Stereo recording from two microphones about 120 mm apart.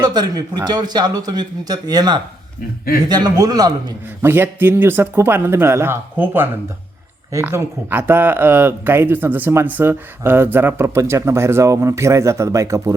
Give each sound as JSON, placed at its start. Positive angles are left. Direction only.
{"t": 0.0, "sound": "a man's voice", "side_deg": -35}
{"t": 4.2, "sound": "speech", "side_deg": -20}